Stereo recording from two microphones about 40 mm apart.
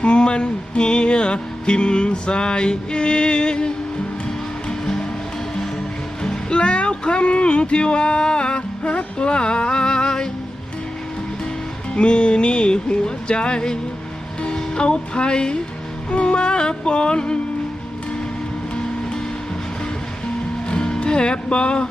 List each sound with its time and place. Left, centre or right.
0.0 s music: left
4.7 s music: centre
6.5 s a sound: left
11.9 s music: left
20.7 s music: centre